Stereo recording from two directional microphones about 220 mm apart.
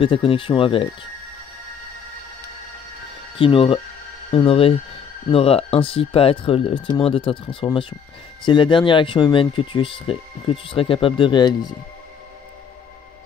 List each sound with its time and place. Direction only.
0.0 s speech: 25° left (ahead or behind)
3.3 s speech: 25° left (ahead or behind)